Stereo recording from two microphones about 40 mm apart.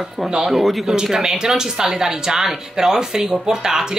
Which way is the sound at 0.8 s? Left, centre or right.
Centre.